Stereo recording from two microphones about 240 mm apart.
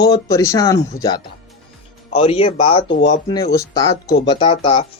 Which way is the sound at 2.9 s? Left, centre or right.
Left.